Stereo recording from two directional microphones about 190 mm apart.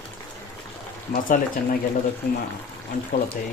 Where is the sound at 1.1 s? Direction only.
45° left (ahead or behind).